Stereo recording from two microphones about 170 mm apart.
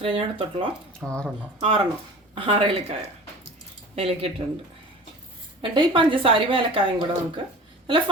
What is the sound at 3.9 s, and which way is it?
Speech, 35° right (ahead or behind).